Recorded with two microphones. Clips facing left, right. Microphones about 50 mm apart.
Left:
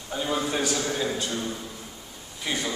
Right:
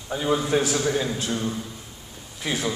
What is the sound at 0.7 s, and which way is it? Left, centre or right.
Speech, centre.